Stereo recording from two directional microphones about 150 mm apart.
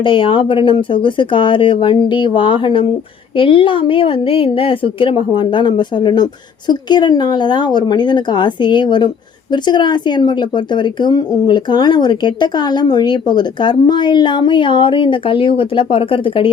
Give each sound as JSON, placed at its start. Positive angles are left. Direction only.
{"t": 0.0, "sound": "a woman's voice", "side_deg": 35}